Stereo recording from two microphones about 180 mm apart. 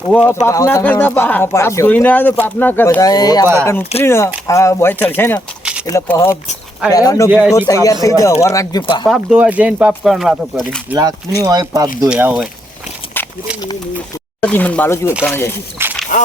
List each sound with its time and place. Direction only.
0.1 s speech: 10° left (ahead or behind)
7.3 s speech: 10° right (ahead or behind)
7.7 s speech: 20° left (ahead or behind)
9.0 s speech: 5° right (ahead or behind)
11.4 s speech: 20° right (ahead or behind)
12.0 s speech: 5° right (ahead or behind)
13.2 s a sound: 10° left (ahead or behind)
14.5 s speech: 10° left (ahead or behind)
15.8 s a sound: 10° right (ahead or behind)